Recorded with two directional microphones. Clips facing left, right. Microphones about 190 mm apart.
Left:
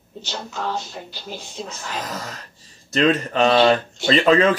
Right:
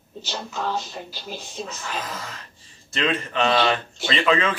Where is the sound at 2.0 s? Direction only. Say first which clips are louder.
Left 3 dB; 40° left (ahead or behind).